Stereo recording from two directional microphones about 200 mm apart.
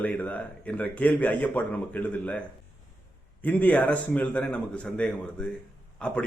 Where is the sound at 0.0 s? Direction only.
5° left (ahead or behind).